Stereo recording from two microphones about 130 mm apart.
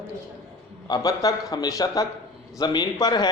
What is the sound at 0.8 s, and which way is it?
A man's voice, 30° left (ahead or behind).